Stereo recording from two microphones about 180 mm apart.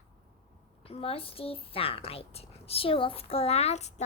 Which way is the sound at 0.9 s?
30° left (ahead or behind).